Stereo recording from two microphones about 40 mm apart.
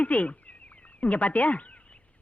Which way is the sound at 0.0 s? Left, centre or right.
Left.